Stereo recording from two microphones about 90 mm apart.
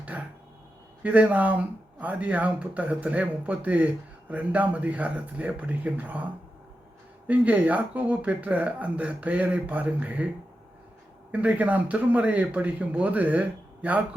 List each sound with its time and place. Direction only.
0.1 s a sound: 20° right (ahead or behind)
1.0 s speech: 15° right (ahead or behind)
7.3 s speech: 15° right (ahead or behind)
11.3 s speech: 15° right (ahead or behind)